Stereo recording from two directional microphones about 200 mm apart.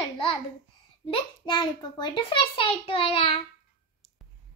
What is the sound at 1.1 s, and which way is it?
Speech, 20° left (ahead or behind).